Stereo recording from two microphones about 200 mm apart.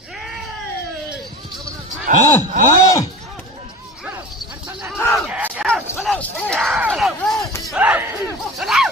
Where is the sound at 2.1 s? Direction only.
45° right (ahead or behind).